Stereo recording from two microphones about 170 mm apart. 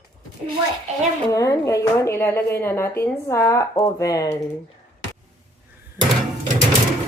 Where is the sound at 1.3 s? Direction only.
20° left (ahead or behind).